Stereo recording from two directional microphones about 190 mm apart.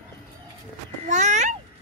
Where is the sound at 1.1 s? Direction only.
40° right (ahead or behind).